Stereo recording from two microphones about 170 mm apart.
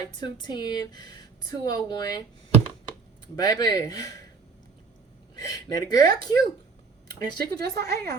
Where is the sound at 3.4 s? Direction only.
20° left (ahead or behind).